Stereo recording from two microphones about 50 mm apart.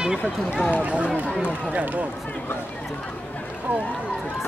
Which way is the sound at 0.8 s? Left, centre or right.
Right.